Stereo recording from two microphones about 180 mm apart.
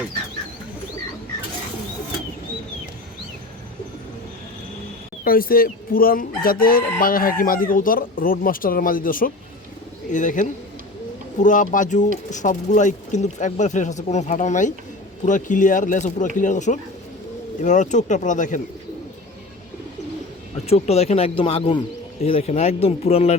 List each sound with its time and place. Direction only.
5.2 s speech: 55° left (ahead or behind)
20.7 s speech: 35° left (ahead or behind)